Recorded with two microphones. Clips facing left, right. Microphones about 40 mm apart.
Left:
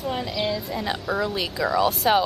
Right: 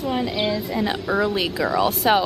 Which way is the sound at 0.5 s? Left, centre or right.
Centre.